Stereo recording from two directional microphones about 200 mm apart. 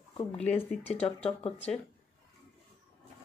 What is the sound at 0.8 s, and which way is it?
Speech, 30° left (ahead or behind).